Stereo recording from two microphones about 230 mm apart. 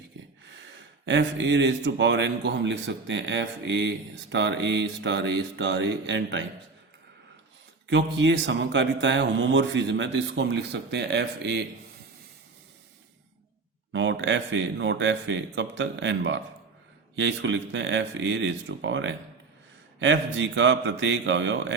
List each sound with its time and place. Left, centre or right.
1.0 s speech: right
7.9 s speech: right
13.9 s speech: right